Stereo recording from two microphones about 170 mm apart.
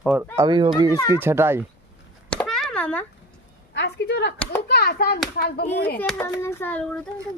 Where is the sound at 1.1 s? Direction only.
15° right (ahead or behind).